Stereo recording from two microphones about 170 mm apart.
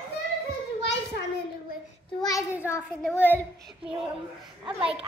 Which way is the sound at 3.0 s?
10° left (ahead or behind).